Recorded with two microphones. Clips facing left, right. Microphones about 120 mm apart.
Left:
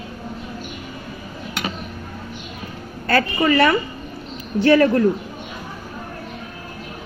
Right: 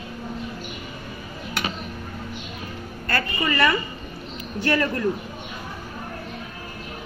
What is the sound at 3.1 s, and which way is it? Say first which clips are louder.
A woman's voice: left 8 dB; 80° left.